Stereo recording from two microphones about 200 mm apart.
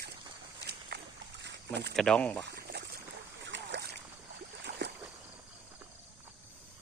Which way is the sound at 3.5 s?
60° right (ahead or behind).